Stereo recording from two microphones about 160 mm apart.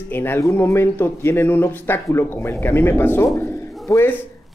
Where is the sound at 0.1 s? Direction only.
15° left (ahead or behind).